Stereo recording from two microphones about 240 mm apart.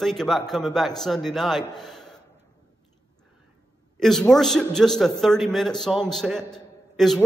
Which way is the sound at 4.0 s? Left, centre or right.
Centre.